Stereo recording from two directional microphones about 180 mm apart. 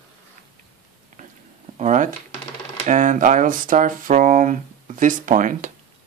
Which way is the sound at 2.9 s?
45° right (ahead or behind).